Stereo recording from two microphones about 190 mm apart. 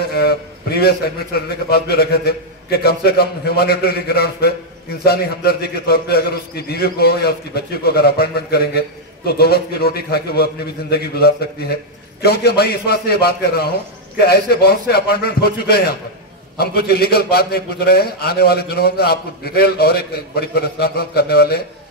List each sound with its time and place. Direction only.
0.1 s a man's voice: 55° left (ahead or behind)